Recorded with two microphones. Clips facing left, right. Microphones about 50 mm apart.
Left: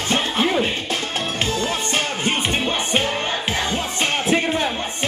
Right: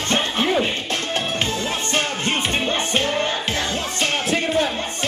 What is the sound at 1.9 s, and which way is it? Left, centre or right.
Music, centre.